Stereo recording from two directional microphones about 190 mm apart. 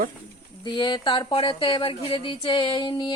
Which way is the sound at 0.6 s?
25° left (ahead or behind).